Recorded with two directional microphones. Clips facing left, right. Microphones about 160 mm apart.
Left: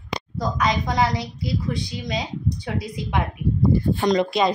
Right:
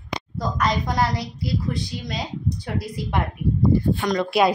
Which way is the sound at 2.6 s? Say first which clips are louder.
Even; centre (ahead or behind).